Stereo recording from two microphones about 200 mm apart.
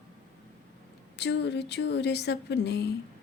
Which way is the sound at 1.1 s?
60° left (ahead or behind).